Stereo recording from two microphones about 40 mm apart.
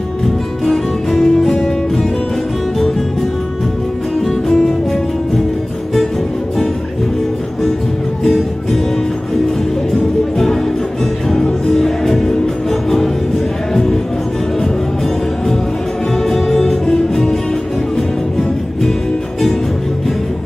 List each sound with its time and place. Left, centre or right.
0.7 s music: centre
4.5 s music: centre
8.2 s music: centre
9.9 s music: centre
11.6 s music: centre
16.2 s music: centre